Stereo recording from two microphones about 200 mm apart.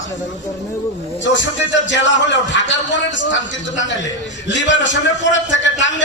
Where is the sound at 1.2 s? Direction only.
65° left (ahead or behind).